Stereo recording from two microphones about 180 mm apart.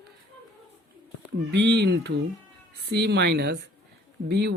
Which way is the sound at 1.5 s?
70° right (ahead or behind).